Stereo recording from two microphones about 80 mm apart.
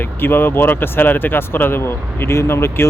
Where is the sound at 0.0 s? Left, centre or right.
Left.